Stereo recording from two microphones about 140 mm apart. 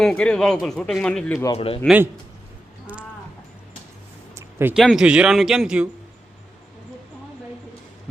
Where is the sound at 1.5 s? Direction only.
45° left (ahead or behind).